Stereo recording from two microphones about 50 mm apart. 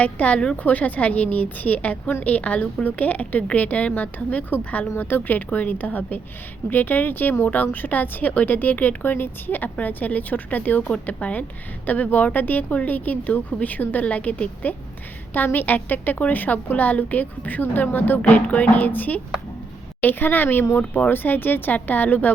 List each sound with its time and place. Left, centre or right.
0.0 s a woman's voice: left
4.9 s a woman's voice: left